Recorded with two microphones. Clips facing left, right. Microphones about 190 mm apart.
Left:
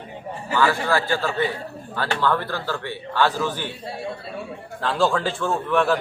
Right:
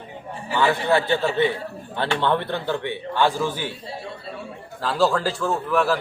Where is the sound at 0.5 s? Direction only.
20° right (ahead or behind).